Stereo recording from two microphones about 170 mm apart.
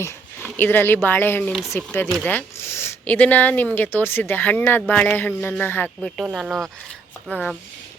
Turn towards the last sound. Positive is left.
turn(degrees=10)  # may be behind; listen again after turning